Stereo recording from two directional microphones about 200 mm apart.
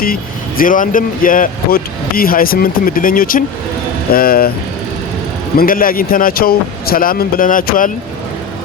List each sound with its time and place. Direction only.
0.0 s speech: 45° left (ahead or behind)
5.5 s speech: 45° left (ahead or behind)